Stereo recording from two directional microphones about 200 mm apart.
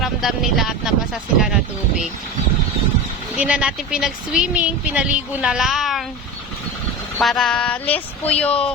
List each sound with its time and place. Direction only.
0.0 s speech: centre (ahead or behind)
3.3 s speech: 5° right (ahead or behind)
7.2 s speech: centre (ahead or behind)